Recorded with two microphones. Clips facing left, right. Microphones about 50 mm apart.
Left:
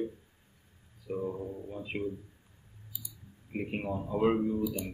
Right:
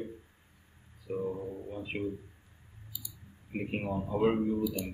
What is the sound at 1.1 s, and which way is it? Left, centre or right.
Speech, centre.